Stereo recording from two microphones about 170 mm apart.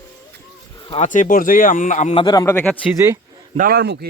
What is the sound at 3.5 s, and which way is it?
Speech, 60° right (ahead or behind).